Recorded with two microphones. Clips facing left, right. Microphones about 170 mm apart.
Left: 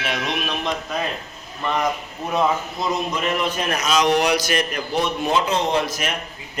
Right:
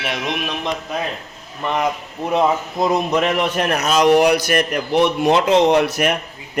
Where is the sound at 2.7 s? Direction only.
50° right (ahead or behind).